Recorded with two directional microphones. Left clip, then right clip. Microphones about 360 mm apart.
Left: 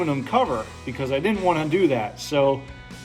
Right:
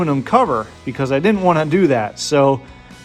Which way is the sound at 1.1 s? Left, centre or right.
Right.